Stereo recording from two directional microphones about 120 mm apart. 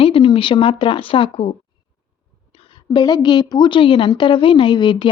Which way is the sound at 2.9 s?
35° left (ahead or behind).